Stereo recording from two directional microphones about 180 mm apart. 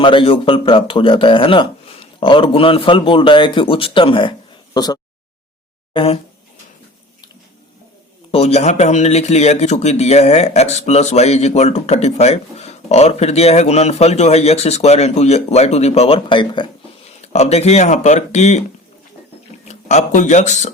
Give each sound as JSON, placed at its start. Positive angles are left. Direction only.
{"t": 0.0, "sound": "speech", "side_deg": 30}
{"t": 8.3, "sound": "speech", "side_deg": 35}
{"t": 19.6, "sound": "speech", "side_deg": 40}